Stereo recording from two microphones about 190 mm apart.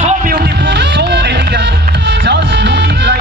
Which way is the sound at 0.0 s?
45° right (ahead or behind).